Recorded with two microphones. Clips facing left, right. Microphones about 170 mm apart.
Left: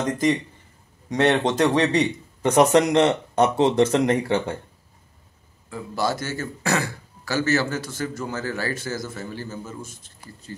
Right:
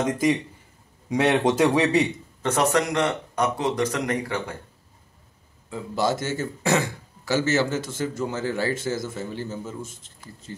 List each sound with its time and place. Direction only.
1.0 s a man's voice: 10° right (ahead or behind)
2.4 s speech: 20° left (ahead or behind)
5.7 s a man's voice: 20° right (ahead or behind)